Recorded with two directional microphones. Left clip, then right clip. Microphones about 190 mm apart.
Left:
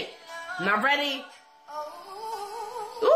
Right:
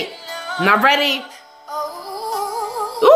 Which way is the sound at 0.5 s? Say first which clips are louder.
Right 10 dB; 25° right (ahead or behind).